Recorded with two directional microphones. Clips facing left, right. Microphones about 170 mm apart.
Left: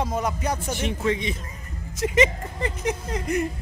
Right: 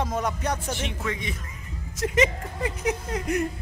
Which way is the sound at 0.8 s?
25° left (ahead or behind).